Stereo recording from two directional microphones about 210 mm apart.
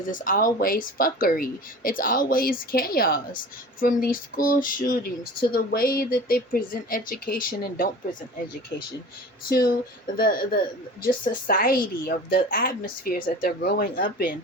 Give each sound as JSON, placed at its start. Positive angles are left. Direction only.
{"t": 0.0, "sound": "speech", "side_deg": 40}
{"t": 3.8, "sound": "a sound", "side_deg": 40}
{"t": 5.4, "sound": "speech", "side_deg": 45}
{"t": 9.5, "sound": "speech", "side_deg": 45}